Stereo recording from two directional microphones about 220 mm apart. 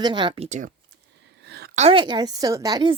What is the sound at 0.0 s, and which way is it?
Speech, 20° right (ahead or behind).